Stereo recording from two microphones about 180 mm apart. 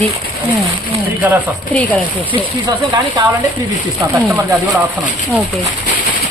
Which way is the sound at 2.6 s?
25° right (ahead or behind).